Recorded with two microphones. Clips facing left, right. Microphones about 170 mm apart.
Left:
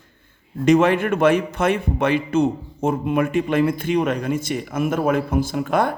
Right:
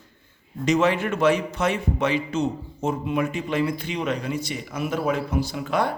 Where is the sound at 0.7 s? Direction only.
55° left (ahead or behind).